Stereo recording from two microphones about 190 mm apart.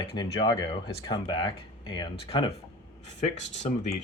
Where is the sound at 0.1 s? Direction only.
25° left (ahead or behind).